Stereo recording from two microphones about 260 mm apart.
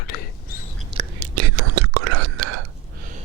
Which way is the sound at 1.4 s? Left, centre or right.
Right.